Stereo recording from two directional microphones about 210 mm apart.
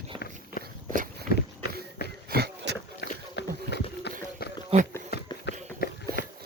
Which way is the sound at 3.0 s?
50° left (ahead or behind).